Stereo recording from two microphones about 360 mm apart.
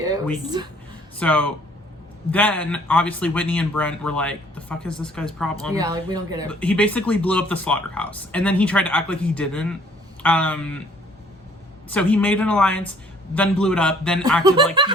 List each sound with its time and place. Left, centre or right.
0.4 s speech: centre
1.2 s speech: centre
5.7 s speech: centre
6.5 s speech: centre
11.9 s speech: centre
14.4 s speech: centre